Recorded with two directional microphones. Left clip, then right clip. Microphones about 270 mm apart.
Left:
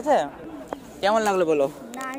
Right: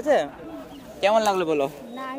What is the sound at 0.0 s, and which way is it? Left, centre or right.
Speech, centre.